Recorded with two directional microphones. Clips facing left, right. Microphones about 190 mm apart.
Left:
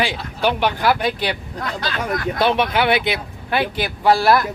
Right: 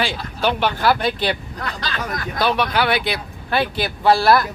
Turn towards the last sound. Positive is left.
turn(degrees=15)  # may be behind; listen again after turning